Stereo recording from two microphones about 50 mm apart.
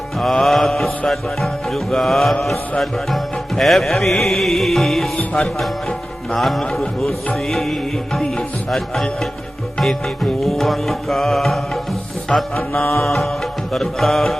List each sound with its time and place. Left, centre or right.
0.2 s music: centre
10.4 s music: centre
12.3 s music: centre
12.8 s music: left
13.1 s music: centre